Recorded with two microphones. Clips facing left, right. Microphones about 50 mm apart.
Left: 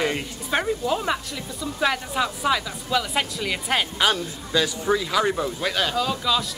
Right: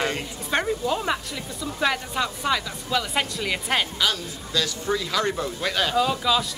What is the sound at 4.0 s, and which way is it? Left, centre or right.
Speech, left.